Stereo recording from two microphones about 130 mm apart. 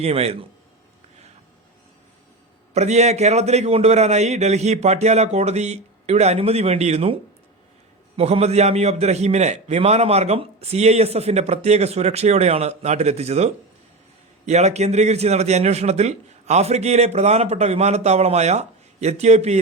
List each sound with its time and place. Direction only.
0.0 s a man's voice: 55° right (ahead or behind)
2.7 s a man's voice: 55° right (ahead or behind)